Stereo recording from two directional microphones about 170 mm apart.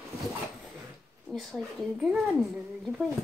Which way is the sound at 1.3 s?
Centre (ahead or behind).